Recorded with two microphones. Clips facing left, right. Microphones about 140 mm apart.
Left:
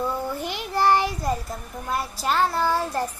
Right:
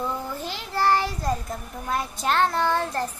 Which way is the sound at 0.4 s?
15° left (ahead or behind).